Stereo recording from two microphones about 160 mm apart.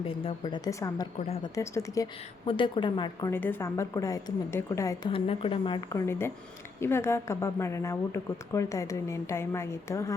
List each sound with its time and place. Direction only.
0.0 s speech: 35° left (ahead or behind); by 2.0 s 20° left (ahead or behind)
2.5 s speech: 30° left (ahead or behind)
3.3 s a woman's voice: 15° left (ahead or behind)
5.0 s speech: 35° left (ahead or behind)
5.9 s a woman's voice: 15° left (ahead or behind)